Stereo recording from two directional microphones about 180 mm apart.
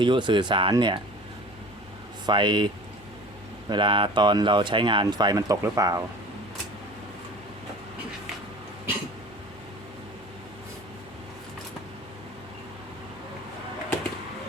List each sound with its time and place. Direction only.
0.0 s speech: 25° right (ahead or behind)
2.2 s speech: 25° right (ahead or behind)
3.7 s speech: 25° right (ahead or behind)